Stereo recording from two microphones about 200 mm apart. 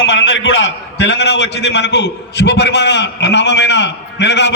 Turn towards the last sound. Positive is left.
turn(degrees=60)  # may be behind; listen again after turning